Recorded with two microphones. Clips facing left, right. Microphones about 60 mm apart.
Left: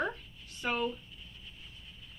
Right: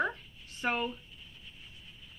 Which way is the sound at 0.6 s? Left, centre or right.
Right.